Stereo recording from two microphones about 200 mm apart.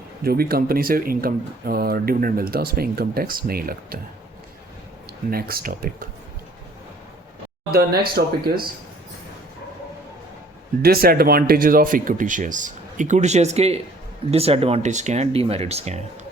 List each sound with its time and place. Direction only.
0.2 s speech: 50° right (ahead or behind)
5.3 s speech: 50° right (ahead or behind)
7.7 s speech: 50° right (ahead or behind)
10.8 s speech: 50° right (ahead or behind); by 16.0 s 30° right (ahead or behind)